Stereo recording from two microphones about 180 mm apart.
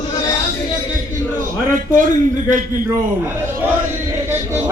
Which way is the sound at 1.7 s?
45° right (ahead or behind).